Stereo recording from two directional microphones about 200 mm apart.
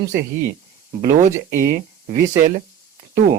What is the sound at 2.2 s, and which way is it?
Speech, 35° right (ahead or behind).